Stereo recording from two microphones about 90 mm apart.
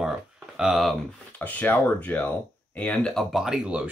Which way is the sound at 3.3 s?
5° right (ahead or behind).